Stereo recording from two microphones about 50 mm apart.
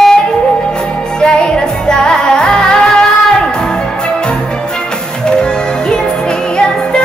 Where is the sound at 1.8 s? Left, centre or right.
Centre.